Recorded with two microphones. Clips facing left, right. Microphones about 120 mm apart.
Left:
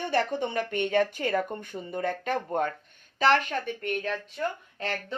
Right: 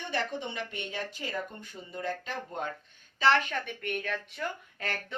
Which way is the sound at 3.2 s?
40° left (ahead or behind).